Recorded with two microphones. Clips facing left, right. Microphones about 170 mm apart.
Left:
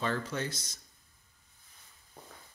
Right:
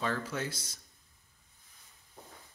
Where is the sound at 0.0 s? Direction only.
5° right (ahead or behind).